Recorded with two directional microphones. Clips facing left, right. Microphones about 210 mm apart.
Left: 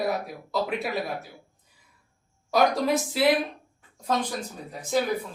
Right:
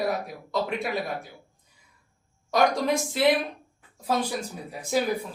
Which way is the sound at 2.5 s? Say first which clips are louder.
Left 1 dB; 5° left (ahead or behind).